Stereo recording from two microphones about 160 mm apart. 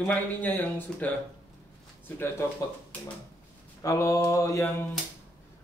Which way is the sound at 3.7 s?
20° left (ahead or behind).